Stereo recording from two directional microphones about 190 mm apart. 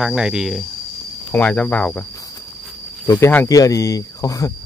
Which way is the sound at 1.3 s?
10° left (ahead or behind).